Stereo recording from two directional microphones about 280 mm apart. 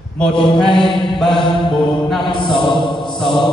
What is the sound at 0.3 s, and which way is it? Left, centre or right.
Mantra, centre.